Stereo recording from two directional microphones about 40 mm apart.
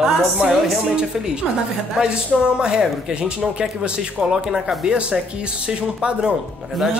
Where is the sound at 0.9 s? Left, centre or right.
Centre.